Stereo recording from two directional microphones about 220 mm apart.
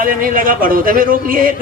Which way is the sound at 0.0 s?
40° right (ahead or behind).